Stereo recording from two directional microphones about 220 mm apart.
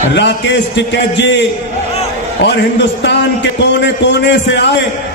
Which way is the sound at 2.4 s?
50° left (ahead or behind).